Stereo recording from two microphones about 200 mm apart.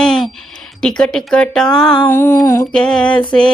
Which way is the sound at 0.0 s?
Centre (ahead or behind).